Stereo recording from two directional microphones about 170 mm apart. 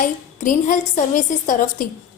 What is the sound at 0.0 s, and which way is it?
A woman's voice, 50° left (ahead or behind).